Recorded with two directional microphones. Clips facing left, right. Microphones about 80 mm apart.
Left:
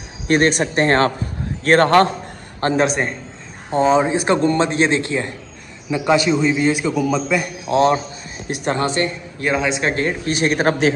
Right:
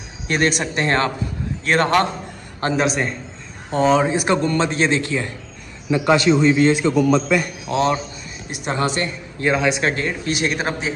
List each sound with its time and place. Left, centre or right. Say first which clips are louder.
0.3 s a man's voice: left 4 dB; left
4.2 s a man's voice: left 2 dB; left
5.9 s a man's voice: right 1 dB; centre
7.6 s a man's voice: left 4 dB; left
9.5 s a man's voice: right 1 dB; left